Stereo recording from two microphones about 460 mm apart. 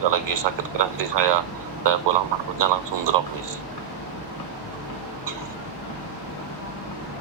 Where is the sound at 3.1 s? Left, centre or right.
Right.